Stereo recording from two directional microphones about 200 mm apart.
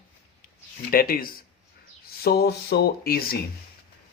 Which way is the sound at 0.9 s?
45° left (ahead or behind).